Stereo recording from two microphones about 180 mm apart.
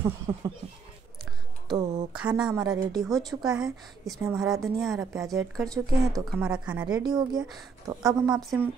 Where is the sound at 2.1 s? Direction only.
5° right (ahead or behind).